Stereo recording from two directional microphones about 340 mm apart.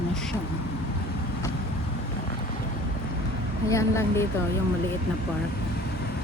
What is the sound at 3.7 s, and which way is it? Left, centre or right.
Speech, centre.